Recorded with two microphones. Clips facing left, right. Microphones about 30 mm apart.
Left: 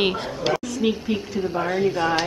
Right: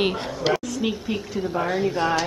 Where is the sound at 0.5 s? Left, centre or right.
Centre.